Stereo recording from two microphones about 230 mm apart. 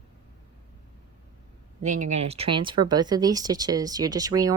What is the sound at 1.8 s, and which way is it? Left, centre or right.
Speech, right.